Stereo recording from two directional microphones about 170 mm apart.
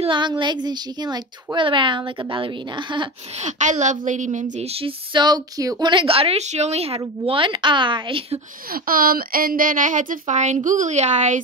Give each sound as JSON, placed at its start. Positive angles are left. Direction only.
{"t": 0.0, "sound": "a woman's voice", "side_deg": -30}
{"t": 3.3, "sound": "a woman's voice", "side_deg": -45}
{"t": 8.7, "sound": "a woman's voice", "side_deg": -55}